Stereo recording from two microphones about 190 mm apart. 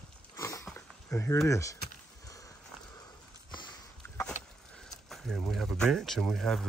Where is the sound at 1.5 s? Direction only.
15° left (ahead or behind).